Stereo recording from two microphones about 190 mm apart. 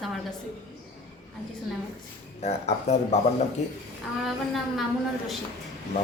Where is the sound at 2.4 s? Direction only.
35° left (ahead or behind).